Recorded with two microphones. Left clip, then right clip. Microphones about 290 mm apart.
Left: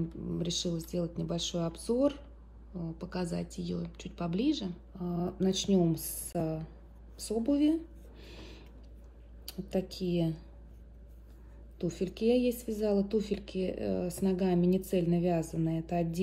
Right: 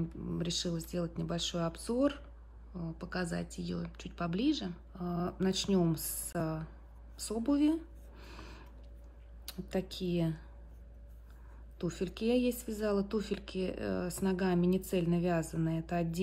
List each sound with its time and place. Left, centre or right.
0.1 s speech: centre
2.7 s speech: centre
3.0 s speech: centre
4.9 s speech: centre
5.2 s speech: centre
7.2 s a sound: centre
9.6 s speech: centre
11.8 s speech: centre
13.3 s speech: right
14.0 s speech: centre